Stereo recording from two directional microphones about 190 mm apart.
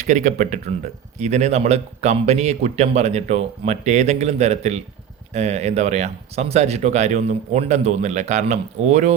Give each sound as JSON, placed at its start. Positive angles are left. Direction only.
{"t": 0.0, "sound": "speech", "side_deg": -40}